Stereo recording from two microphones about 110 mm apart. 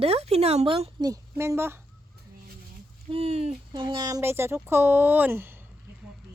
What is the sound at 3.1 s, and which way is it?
Speech, 65° right (ahead or behind).